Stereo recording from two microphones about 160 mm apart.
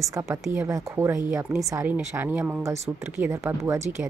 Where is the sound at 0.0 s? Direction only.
20° right (ahead or behind).